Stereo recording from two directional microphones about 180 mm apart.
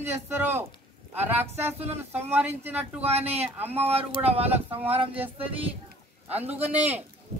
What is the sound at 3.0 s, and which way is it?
Speech, 35° right (ahead or behind).